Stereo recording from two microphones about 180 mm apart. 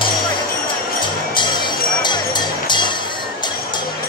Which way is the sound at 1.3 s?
25° left (ahead or behind).